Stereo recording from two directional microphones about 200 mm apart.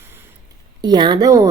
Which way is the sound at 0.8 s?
20° right (ahead or behind).